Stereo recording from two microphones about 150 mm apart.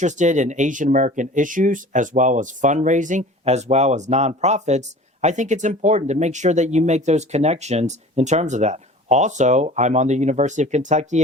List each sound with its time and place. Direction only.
0.0 s speech: 55° right (ahead or behind)